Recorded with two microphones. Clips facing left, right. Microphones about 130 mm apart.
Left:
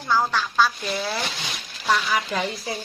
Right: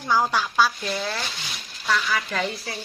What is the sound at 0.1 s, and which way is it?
Speech, 10° right (ahead or behind).